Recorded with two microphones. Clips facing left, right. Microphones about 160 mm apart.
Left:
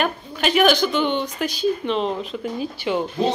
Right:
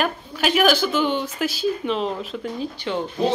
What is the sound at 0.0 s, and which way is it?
Speech, 5° right (ahead or behind).